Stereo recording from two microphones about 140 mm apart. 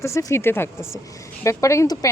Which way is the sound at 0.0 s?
20° left (ahead or behind).